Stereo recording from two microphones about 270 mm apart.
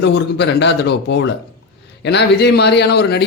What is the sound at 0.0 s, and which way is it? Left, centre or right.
A man's voice, left.